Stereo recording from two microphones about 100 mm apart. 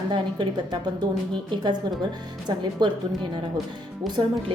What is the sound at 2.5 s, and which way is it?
Speech, 45° right (ahead or behind).